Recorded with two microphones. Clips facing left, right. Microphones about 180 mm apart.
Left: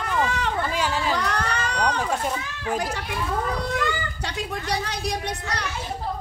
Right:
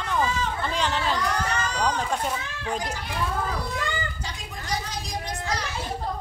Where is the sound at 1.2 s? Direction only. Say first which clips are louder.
Even; 65° left (ahead or behind).